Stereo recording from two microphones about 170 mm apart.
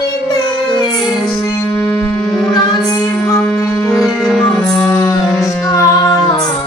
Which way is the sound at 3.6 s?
20° left (ahead or behind).